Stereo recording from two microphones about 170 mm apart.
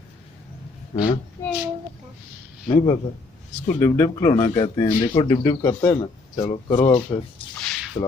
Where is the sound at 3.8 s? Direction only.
20° left (ahead or behind).